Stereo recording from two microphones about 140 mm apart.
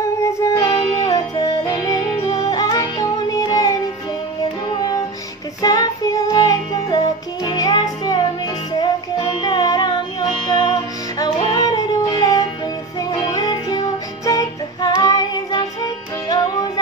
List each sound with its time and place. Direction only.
0.2 s music: 20° left (ahead or behind)
5.6 s music: 25° left (ahead or behind)
9.4 s music: 30° left (ahead or behind)